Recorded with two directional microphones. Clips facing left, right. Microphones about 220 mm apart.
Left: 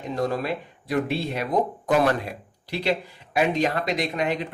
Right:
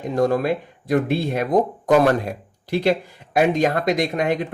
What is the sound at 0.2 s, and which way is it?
Speech, 50° right (ahead or behind).